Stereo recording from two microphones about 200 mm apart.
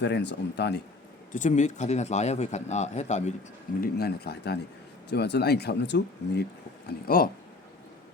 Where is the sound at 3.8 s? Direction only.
50° left (ahead or behind).